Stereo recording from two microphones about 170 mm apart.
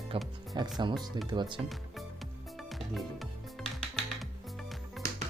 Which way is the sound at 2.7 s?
Centre (ahead or behind).